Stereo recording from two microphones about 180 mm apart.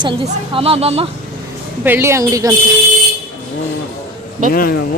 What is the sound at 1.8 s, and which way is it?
Speech, 10° right (ahead or behind).